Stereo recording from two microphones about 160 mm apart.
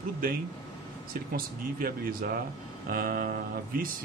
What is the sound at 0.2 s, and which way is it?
Speech, 65° right (ahead or behind).